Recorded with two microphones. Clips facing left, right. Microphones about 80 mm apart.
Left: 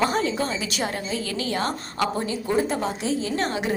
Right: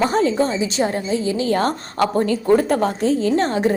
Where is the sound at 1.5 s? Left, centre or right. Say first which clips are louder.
Right 7 dB; right.